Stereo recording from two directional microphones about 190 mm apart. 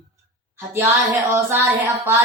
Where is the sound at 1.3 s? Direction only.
15° right (ahead or behind).